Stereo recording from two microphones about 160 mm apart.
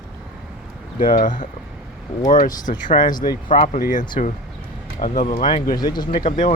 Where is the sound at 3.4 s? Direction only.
35° left (ahead or behind).